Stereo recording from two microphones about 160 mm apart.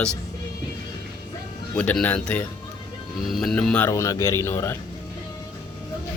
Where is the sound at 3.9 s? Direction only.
20° left (ahead or behind).